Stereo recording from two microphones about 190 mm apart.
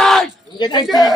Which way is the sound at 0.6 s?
25° left (ahead or behind).